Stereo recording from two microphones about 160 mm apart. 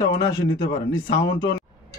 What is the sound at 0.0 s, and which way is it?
A man's voice, 25° left (ahead or behind).